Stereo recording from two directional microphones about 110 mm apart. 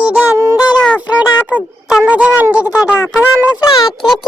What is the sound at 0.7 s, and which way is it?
Speech, 10° left (ahead or behind).